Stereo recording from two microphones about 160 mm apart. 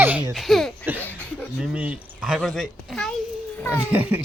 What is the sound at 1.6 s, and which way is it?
A child's voice, 10° right (ahead or behind).